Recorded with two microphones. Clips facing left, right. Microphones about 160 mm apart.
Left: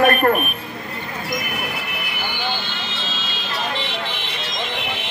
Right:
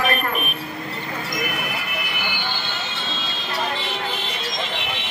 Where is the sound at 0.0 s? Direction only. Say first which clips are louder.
Left 8 dB; 50° left (ahead or behind).